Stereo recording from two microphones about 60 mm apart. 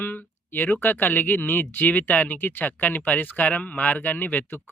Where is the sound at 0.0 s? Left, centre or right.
Left.